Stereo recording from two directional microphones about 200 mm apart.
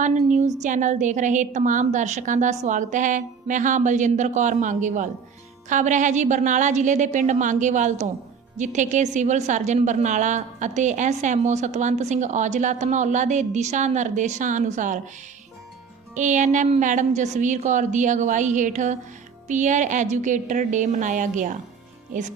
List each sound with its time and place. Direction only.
0.3 s a woman's voice: 35° right (ahead or behind)
16.1 s a woman's voice: 40° right (ahead or behind)